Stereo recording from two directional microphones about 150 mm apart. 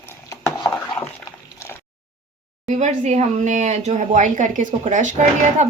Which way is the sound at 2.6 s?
50° right (ahead or behind).